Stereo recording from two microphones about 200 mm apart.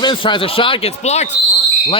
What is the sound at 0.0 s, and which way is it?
Speech, 25° left (ahead or behind).